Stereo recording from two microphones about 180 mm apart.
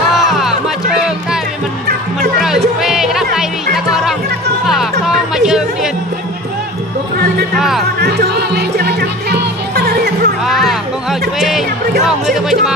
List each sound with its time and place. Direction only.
0.1 s music: centre (ahead or behind)
2.3 s music: centre (ahead or behind)
8.0 s music: 65° right (ahead or behind)
10.4 s music: centre (ahead or behind)